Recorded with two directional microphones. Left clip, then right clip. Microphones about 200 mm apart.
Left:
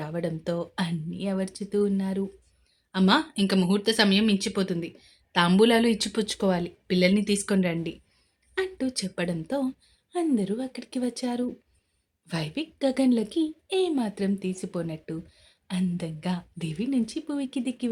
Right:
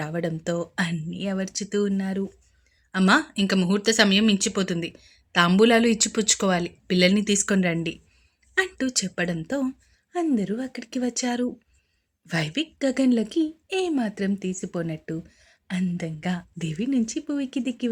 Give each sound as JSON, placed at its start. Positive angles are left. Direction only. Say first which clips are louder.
{"t": 0.0, "sound": "speech", "louder": "right 2 dB", "side_deg": -15}